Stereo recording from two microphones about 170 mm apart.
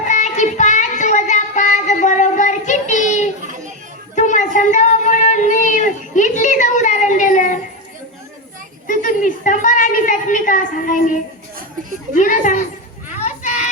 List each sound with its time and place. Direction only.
0.0 s child singing: 45° left (ahead or behind)
8.9 s a sound: 50° left (ahead or behind)
13.1 s children playing: 45° left (ahead or behind)